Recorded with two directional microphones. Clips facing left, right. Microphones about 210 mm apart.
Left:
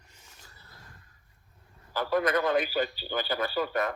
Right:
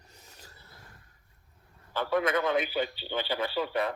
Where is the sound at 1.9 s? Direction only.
25° right (ahead or behind).